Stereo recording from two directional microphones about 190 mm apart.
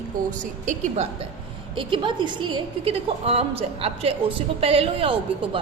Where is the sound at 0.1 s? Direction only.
45° right (ahead or behind).